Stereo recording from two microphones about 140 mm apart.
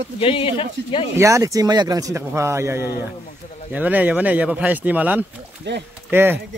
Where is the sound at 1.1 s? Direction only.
20° right (ahead or behind).